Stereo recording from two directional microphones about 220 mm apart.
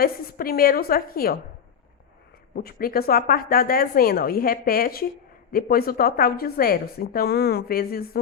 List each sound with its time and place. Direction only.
0.0 s a woman's voice: 45° left (ahead or behind)
2.6 s a woman's voice: 40° left (ahead or behind)